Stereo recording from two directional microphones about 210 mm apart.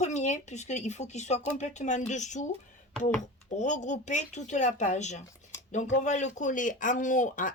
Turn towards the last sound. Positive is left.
turn(degrees=40)  # may be behind; listen again after turning